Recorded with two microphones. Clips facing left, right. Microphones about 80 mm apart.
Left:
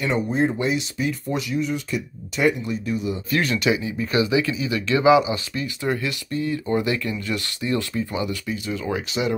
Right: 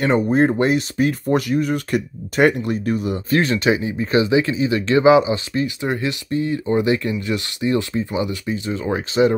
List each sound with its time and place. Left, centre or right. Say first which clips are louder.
0.0 s speech: right 5 dB; right
3.3 s speech: right 4 dB; right